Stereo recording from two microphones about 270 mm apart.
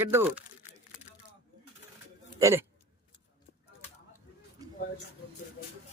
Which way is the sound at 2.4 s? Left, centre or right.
Centre.